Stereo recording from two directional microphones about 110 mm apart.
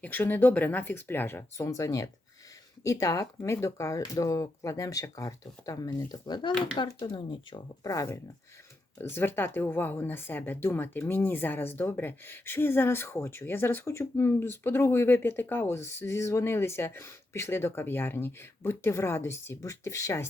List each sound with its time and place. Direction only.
0.0 s speech: 15° left (ahead or behind); by 7.6 s 45° left (ahead or behind)
7.9 s speech: 30° left (ahead or behind)